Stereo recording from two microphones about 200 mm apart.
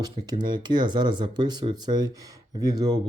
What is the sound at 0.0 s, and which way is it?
Speech, 20° right (ahead or behind).